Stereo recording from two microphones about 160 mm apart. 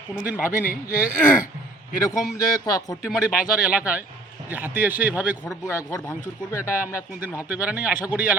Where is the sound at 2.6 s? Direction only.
20° left (ahead or behind).